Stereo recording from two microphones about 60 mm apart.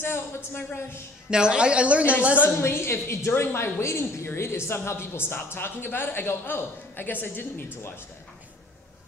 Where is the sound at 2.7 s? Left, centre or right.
Left.